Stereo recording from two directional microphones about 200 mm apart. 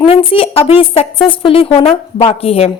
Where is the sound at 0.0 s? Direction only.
30° left (ahead or behind).